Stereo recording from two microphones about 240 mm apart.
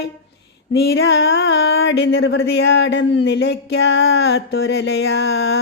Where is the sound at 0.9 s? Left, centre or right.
Left.